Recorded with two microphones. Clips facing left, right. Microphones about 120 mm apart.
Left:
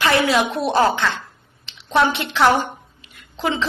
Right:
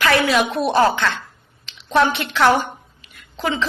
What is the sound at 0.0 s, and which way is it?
A woman's voice, 25° left (ahead or behind).